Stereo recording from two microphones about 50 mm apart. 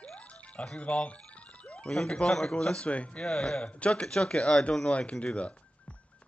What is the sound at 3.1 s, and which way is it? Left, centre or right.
Speech, centre.